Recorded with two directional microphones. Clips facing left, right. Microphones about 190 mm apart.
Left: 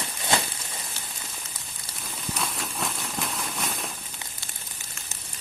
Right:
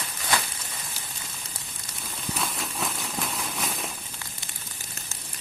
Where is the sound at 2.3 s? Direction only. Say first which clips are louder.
Even; centre (ahead or behind).